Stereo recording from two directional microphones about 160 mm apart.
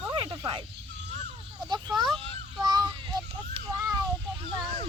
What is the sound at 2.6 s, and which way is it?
Child singing, 25° right (ahead or behind).